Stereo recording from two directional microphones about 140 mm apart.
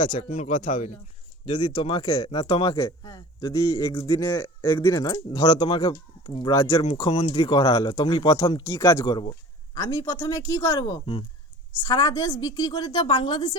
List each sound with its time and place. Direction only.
0.0 s speech: 60° left (ahead or behind)
1.5 s a woman's voice: 40° left (ahead or behind)
4.3 s speech: 15° left (ahead or behind)
5.5 s a woman's voice: 35° left (ahead or behind)
7.2 s speech: 50° left (ahead or behind)
7.4 s a woman's voice: 35° left (ahead or behind)
8.6 s speech: 20° left (ahead or behind)
9.0 s a woman's voice: 30° left (ahead or behind)